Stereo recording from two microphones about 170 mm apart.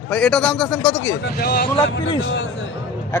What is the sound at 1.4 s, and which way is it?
Speech, 65° left (ahead or behind).